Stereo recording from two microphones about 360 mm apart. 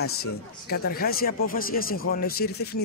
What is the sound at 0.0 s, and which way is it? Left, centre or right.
Speech, left.